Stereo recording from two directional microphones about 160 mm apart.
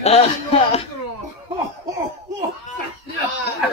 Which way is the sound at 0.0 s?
40° left (ahead or behind).